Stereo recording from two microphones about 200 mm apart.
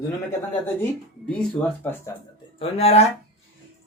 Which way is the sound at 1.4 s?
10° left (ahead or behind).